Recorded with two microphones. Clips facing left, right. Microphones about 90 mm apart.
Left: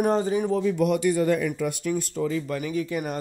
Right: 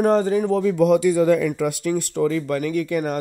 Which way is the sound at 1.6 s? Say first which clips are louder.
Right 4 dB; 85° right.